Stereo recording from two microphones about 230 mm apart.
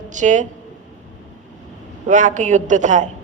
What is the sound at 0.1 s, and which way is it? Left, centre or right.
Speech, right.